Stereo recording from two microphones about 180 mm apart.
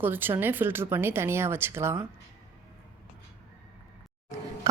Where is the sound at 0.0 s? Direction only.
10° right (ahead or behind).